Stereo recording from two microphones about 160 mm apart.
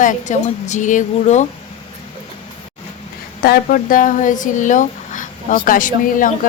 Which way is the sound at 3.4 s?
65° left (ahead or behind).